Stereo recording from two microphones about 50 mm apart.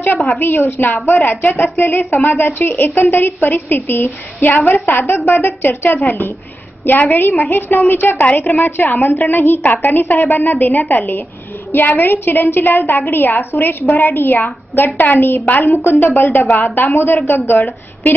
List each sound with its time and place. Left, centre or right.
0.4 s a woman's voice: left
15.4 s a woman's voice: left
15.8 s a woman's voice: left